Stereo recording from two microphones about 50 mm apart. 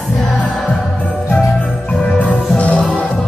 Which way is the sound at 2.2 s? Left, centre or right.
Left.